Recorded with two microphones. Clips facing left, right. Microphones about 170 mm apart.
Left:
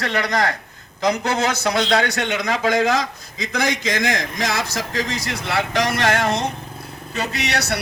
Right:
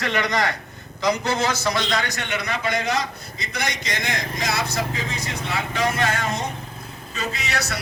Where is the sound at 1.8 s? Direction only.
90° left.